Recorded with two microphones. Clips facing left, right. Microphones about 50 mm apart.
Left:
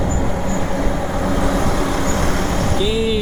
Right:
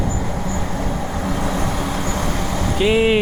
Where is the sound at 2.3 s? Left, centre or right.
Left.